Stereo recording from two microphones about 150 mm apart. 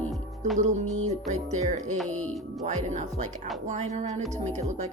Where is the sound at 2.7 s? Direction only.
50° right (ahead or behind).